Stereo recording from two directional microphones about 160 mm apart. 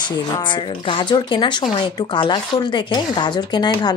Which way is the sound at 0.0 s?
30° left (ahead or behind).